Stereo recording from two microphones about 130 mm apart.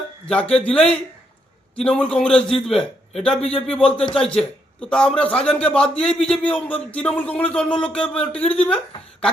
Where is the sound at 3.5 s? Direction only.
50° left (ahead or behind).